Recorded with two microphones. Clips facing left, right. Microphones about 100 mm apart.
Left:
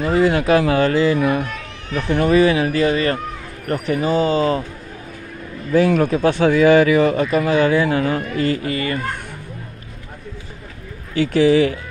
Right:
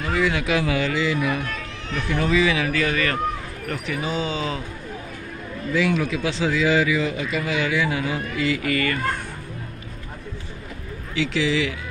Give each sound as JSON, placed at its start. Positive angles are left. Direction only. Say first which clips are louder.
{"t": 0.0, "sound": "speech", "louder": "left 7 dB", "side_deg": 35}
{"t": 2.1, "sound": "speech", "louder": "left 6 dB", "side_deg": 55}
{"t": 3.6, "sound": "speech", "louder": "left 9 dB", "side_deg": 45}
{"t": 5.7, "sound": "speech", "louder": "left 7 dB", "side_deg": 45}
{"t": 8.6, "sound": "speech", "louder": "left 1 dB", "side_deg": 30}
{"t": 11.1, "sound": "speech", "louder": "left 9 dB", "side_deg": 50}